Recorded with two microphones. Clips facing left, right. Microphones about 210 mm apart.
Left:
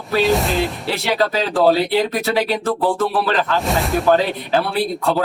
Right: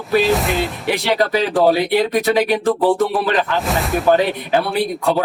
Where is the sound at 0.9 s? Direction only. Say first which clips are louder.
Right 3 dB; 15° right (ahead or behind).